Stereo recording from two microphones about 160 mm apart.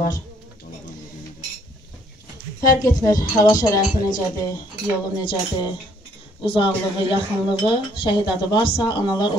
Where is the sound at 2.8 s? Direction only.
20° left (ahead or behind).